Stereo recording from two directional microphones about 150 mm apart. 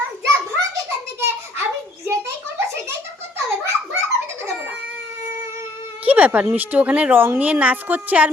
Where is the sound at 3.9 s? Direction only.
20° right (ahead or behind).